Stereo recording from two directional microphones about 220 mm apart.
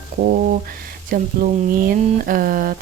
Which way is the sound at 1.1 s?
40° right (ahead or behind).